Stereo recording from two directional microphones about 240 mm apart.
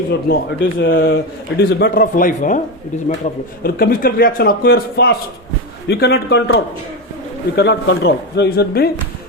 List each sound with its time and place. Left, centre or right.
0.1 s a man's voice: left
3.6 s a man's voice: left